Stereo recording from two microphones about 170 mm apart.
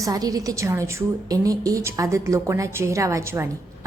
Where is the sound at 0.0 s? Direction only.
20° right (ahead or behind).